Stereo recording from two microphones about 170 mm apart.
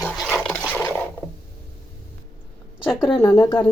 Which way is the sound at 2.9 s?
Centre (ahead or behind).